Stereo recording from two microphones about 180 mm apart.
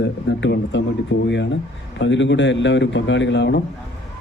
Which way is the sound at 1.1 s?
70° left (ahead or behind).